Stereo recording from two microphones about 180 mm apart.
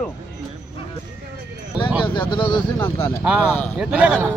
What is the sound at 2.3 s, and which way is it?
Speech, 25° left (ahead or behind).